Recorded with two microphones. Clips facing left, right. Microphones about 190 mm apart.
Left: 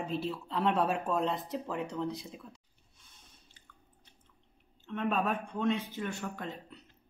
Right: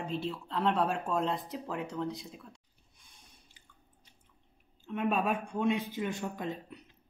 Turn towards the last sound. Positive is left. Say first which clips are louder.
# right 4 dB
turn(degrees=-15)  # may be behind; listen again after turning